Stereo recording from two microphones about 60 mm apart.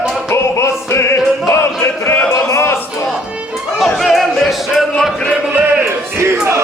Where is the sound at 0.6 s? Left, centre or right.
Left.